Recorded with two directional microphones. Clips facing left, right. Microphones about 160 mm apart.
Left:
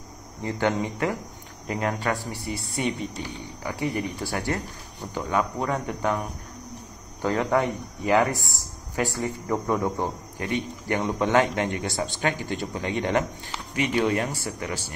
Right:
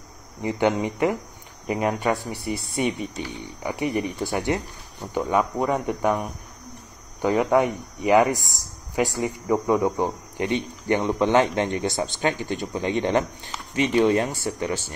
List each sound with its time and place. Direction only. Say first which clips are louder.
0.4 s speech: right 3 dB; 15° right (ahead or behind)